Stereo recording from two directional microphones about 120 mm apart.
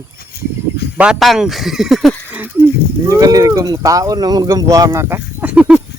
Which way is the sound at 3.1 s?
30° right (ahead or behind).